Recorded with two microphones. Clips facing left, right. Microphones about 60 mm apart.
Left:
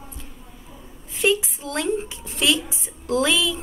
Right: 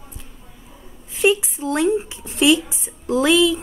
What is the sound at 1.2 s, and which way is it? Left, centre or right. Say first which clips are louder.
A woman's voice: right 4 dB; right.